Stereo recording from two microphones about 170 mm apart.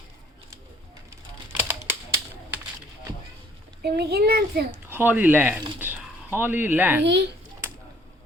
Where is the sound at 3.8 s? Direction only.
70° right (ahead or behind).